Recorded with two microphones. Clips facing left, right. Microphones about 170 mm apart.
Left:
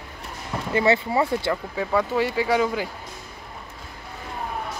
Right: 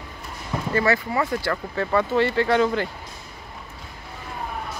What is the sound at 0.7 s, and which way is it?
Speech, 25° left (ahead or behind).